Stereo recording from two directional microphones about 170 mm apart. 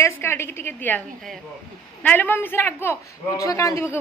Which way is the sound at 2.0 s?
10° left (ahead or behind).